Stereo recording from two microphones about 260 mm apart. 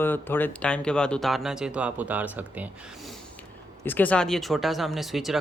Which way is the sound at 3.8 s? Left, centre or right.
Centre.